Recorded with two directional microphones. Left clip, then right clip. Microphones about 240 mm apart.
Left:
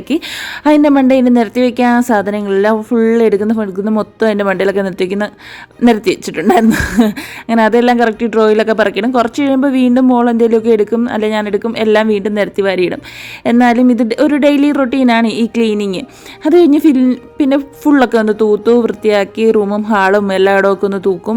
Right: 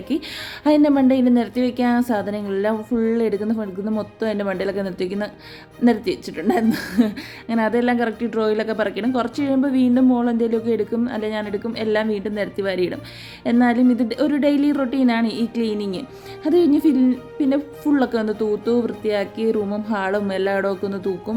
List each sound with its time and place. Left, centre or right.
0.1 s a woman's voice: left